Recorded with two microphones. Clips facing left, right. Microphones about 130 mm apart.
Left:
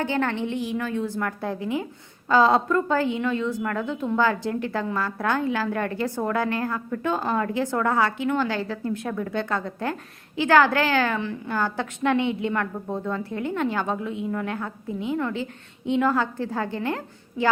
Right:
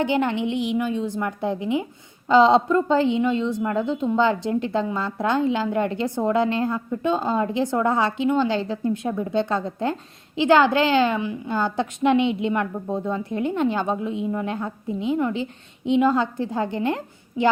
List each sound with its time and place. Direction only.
0.0 s a woman's voice: 20° right (ahead or behind)